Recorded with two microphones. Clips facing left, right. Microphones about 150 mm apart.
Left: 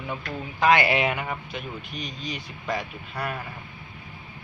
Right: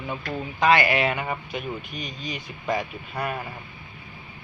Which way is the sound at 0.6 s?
5° left (ahead or behind).